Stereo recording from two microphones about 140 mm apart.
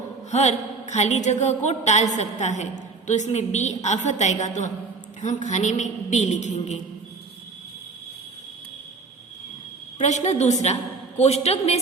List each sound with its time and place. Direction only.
0.3 s a woman's voice: 55° left (ahead or behind)
10.0 s a woman's voice: 55° left (ahead or behind)